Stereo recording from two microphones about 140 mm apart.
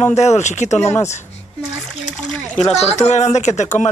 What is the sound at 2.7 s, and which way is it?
Speech, 50° left (ahead or behind).